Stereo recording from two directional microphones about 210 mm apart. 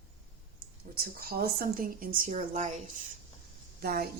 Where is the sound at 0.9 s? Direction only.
45° right (ahead or behind).